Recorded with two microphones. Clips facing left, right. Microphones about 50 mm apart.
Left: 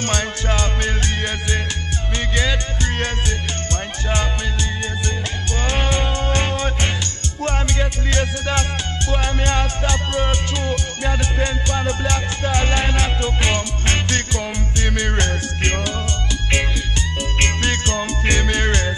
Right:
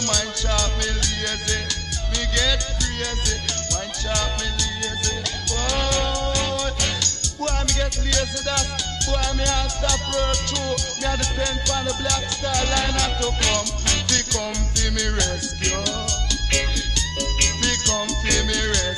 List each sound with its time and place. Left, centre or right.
0.0 s music: left
5.6 s music: left
17.4 s music: left